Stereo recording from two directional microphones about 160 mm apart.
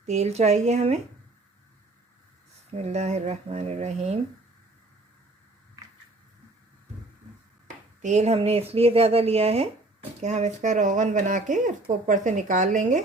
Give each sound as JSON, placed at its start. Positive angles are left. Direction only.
{"t": 0.0, "sound": "speech", "side_deg": -45}
{"t": 2.7, "sound": "speech", "side_deg": -45}
{"t": 8.0, "sound": "speech", "side_deg": -45}